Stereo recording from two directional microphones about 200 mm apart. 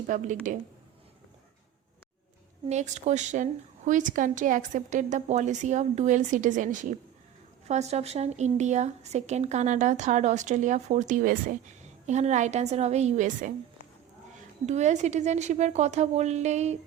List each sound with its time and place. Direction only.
0.1 s a woman's voice: 40° right (ahead or behind)
2.6 s a woman's voice: 35° right (ahead or behind)
14.7 s a woman's voice: 35° right (ahead or behind)